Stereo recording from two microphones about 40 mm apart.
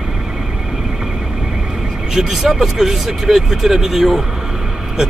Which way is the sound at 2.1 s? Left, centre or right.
Centre.